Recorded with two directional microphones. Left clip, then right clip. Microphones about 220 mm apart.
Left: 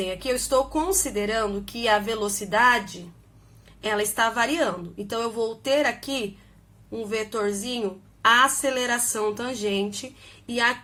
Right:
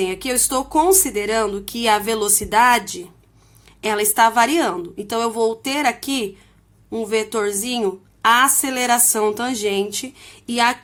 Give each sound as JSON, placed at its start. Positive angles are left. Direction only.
{"t": 0.0, "sound": "a woman's voice", "side_deg": -45}